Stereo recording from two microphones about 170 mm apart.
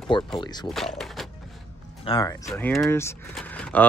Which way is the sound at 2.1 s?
30° left (ahead or behind).